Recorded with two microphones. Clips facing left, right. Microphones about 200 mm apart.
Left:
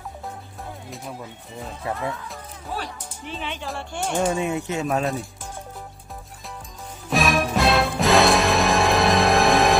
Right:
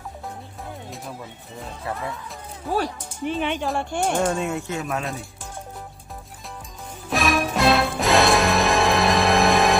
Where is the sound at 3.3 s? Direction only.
55° right (ahead or behind).